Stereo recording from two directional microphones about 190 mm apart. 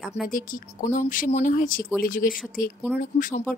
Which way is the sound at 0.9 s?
45° left (ahead or behind).